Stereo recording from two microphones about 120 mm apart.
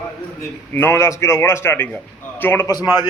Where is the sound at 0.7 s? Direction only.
20° left (ahead or behind).